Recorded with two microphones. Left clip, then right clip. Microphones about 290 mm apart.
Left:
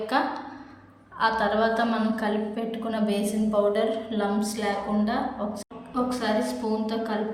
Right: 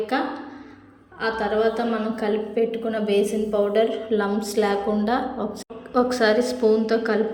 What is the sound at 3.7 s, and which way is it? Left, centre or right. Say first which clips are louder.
A woman's voice: right 5 dB; centre.